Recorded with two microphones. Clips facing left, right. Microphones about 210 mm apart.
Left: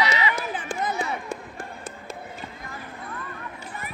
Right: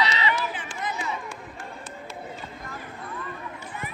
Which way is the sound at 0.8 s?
60° left (ahead or behind).